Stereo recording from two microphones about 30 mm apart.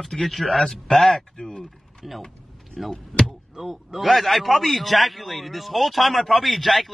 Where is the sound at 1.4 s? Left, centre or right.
Left.